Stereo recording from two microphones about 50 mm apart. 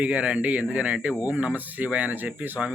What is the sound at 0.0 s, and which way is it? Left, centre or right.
Speech, right.